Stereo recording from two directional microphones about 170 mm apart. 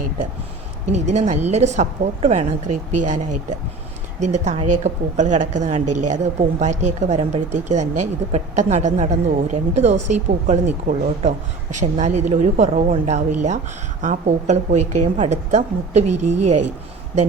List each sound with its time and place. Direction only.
0.9 s a woman's voice: 40° right (ahead or behind)
4.2 s a woman's voice: 45° right (ahead or behind)